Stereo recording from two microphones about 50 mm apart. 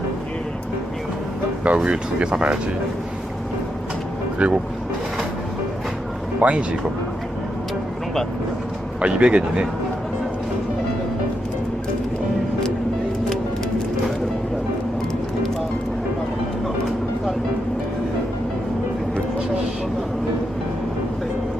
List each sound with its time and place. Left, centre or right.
1.6 s speech: right
4.4 s speech: right
6.4 s speech: right
9.0 s speech: right